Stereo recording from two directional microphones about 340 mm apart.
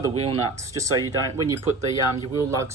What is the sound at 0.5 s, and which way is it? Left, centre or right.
Speech, right.